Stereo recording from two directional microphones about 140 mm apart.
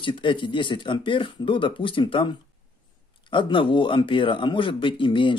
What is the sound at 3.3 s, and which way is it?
Speech, 35° left (ahead or behind).